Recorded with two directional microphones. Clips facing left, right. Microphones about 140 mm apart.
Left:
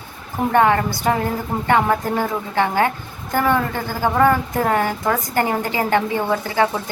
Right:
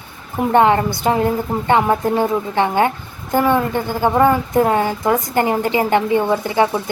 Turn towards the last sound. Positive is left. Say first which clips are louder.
# right 3 dB
turn(degrees=-20)  # may be behind; listen again after turning